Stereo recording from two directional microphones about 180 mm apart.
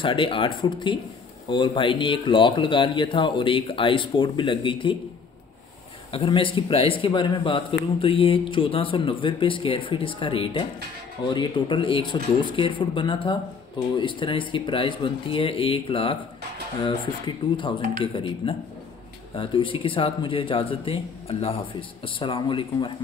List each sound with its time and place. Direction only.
0.0 s speech: 30° left (ahead or behind)
6.1 s speech: 30° left (ahead or behind)